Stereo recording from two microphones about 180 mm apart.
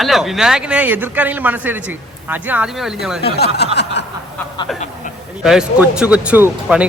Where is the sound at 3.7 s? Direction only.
75° left (ahead or behind).